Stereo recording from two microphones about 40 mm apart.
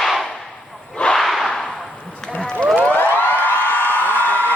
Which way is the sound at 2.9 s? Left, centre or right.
Left.